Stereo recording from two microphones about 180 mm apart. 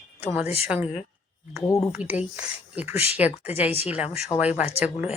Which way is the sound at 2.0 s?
10° right (ahead or behind).